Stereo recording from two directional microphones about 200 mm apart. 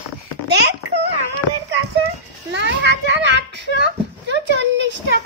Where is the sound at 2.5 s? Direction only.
65° right (ahead or behind).